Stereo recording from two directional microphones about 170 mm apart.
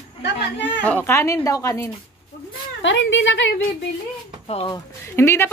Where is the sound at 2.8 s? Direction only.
90° left.